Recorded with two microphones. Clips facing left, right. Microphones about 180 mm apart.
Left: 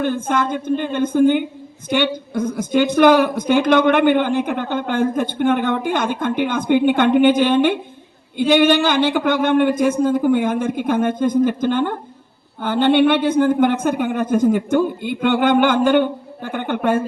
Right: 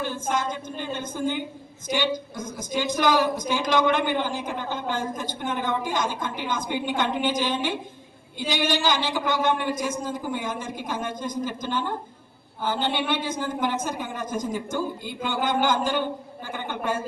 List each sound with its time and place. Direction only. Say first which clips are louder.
0.0 s a woman's voice: left 8 dB; 60° left (ahead or behind)